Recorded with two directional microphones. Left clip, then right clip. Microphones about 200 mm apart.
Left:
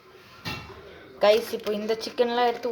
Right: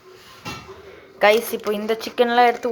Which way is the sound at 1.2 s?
10° right (ahead or behind).